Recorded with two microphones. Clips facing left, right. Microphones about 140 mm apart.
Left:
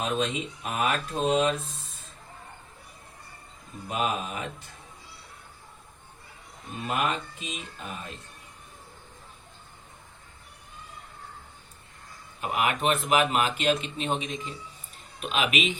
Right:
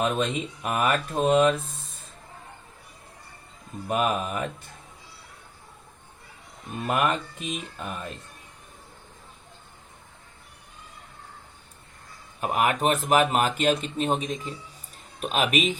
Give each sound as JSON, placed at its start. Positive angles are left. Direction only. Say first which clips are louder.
{"t": 0.0, "sound": "speech", "louder": "right 3 dB", "side_deg": -55}
{"t": 3.8, "sound": "speech", "louder": "right 4 dB", "side_deg": -55}
{"t": 6.8, "sound": "speech", "louder": "right 4 dB", "side_deg": -55}
{"t": 12.4, "sound": "speech", "louder": "right 3 dB", "side_deg": -45}